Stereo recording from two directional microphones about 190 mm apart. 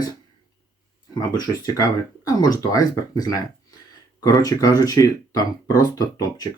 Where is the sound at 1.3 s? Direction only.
20° left (ahead or behind).